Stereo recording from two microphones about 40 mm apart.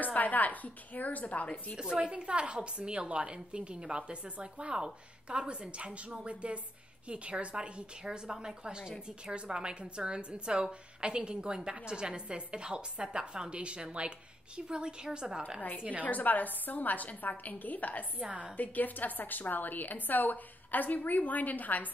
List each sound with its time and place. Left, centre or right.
0.0 s a woman's voice: left
1.8 s a woman's voice: right
16.0 s a woman's voice: left